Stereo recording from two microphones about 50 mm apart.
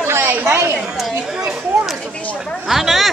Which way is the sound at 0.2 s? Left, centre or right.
Right.